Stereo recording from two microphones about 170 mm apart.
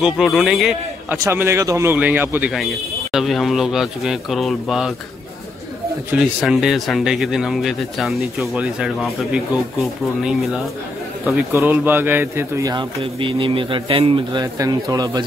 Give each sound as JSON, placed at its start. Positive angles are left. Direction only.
{"t": 0.0, "sound": "speech", "side_deg": 0}
{"t": 1.0, "sound": "speech", "side_deg": -15}
{"t": 2.5, "sound": "speech", "side_deg": 0}
{"t": 6.4, "sound": "speech", "side_deg": 0}
{"t": 11.2, "sound": "a man's voice", "side_deg": -10}